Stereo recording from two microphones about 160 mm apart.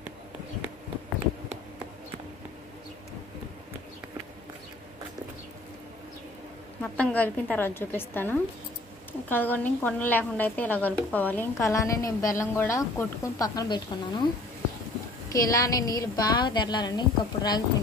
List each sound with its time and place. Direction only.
6.8 s a woman's voice: 10° left (ahead or behind)
15.3 s a woman's voice: 20° left (ahead or behind)